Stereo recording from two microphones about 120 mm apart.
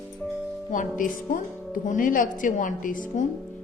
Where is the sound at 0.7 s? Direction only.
90° left.